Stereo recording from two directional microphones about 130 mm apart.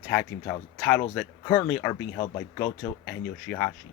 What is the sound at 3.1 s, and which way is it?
Speech, 15° left (ahead or behind).